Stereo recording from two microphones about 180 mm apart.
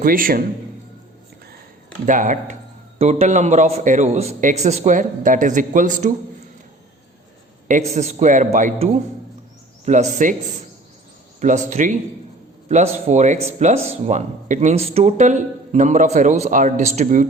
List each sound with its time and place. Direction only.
0.0 s a man's voice: 50° right (ahead or behind)
2.0 s a man's voice: 45° right (ahead or behind)
7.7 s a man's voice: 40° right (ahead or behind)
11.3 s a man's voice: 40° right (ahead or behind)